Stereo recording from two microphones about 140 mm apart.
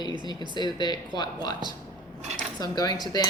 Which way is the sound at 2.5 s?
30° left (ahead or behind).